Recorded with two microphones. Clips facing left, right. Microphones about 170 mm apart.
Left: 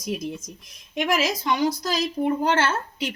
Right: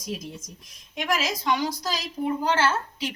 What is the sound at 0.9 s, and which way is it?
Speech, 60° left (ahead or behind).